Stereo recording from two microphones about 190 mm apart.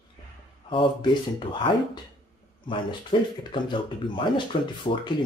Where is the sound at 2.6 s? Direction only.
25° left (ahead or behind).